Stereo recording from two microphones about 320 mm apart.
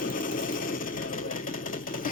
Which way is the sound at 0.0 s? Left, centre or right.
Left.